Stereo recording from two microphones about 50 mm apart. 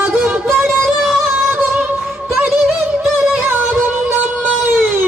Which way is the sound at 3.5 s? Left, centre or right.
Right.